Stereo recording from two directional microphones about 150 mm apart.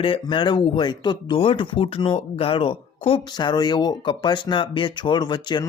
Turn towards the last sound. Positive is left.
turn(degrees=30)  # may be behind; listen again after turning